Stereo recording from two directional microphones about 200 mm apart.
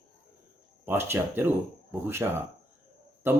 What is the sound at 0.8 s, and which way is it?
Speech, 10° right (ahead or behind).